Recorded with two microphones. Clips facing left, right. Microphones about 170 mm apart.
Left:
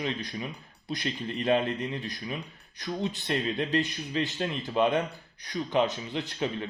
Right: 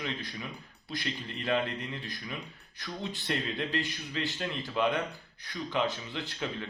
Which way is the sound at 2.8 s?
20° left (ahead or behind).